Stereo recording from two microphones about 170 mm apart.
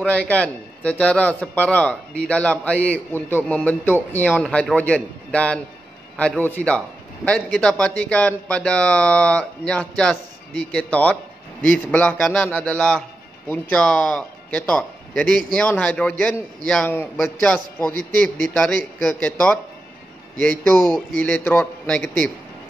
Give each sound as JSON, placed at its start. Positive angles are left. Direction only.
{"t": 0.0, "sound": "a man's voice", "side_deg": 10}